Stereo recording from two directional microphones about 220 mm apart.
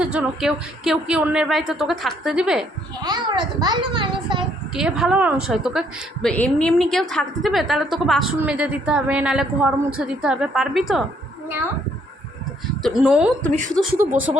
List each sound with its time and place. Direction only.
0.0 s a woman's voice: 5° right (ahead or behind)
3.0 s a child's voice: 20° right (ahead or behind)
4.7 s a woman's voice: centre (ahead or behind)
12.8 s a woman's voice: 5° right (ahead or behind)